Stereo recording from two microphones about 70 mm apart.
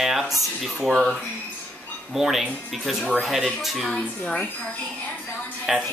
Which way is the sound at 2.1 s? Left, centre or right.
Centre.